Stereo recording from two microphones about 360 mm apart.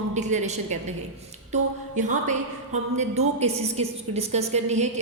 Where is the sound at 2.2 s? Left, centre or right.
Centre.